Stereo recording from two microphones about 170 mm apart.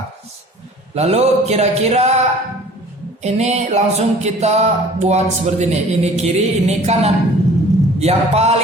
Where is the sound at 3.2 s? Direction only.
40° right (ahead or behind).